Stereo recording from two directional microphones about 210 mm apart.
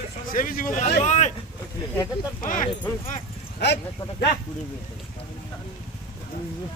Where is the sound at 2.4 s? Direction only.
40° left (ahead or behind).